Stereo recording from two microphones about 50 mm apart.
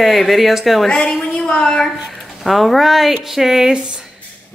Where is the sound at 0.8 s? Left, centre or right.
Centre.